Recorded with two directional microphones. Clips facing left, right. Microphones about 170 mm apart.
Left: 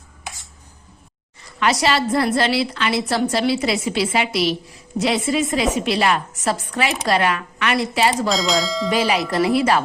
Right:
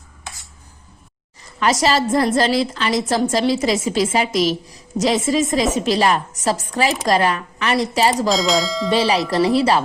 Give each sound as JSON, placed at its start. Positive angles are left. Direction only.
{"t": 1.4, "sound": "a woman's voice", "side_deg": -40}
{"t": 8.3, "sound": "speech", "side_deg": 0}
{"t": 8.9, "sound": "a woman's voice", "side_deg": -30}